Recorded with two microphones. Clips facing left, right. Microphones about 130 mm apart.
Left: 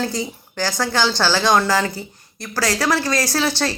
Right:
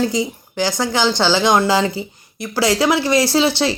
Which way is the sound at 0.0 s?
15° right (ahead or behind).